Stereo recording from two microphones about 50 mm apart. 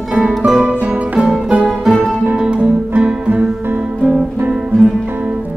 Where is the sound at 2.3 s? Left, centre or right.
Right.